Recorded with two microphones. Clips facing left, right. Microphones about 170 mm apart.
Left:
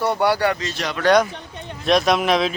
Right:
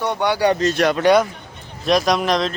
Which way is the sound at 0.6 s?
55° right (ahead or behind).